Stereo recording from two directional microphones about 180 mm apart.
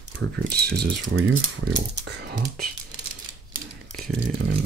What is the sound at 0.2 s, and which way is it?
Speech, 75° right (ahead or behind).